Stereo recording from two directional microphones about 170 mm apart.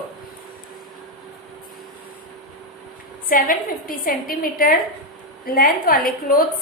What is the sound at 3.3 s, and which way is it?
A woman's voice, 55° left (ahead or behind).